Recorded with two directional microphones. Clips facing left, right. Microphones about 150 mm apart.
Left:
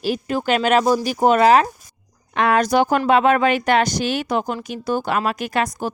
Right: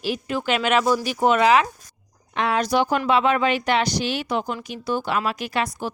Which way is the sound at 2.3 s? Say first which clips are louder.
Left 4 dB; 55° left (ahead or behind).